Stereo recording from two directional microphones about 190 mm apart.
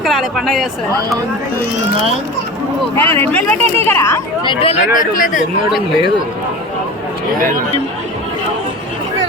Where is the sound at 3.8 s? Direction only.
15° left (ahead or behind).